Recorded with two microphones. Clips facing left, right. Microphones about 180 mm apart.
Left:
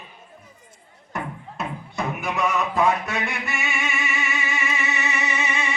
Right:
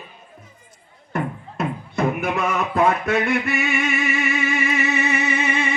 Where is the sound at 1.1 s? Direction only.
55° right (ahead or behind).